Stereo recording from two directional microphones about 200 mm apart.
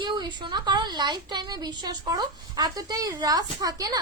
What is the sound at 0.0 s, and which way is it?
A woman's voice, 20° right (ahead or behind).